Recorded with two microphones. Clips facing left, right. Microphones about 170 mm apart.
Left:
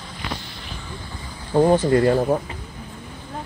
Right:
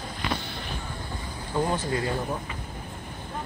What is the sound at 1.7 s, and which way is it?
Speech, 60° left (ahead or behind).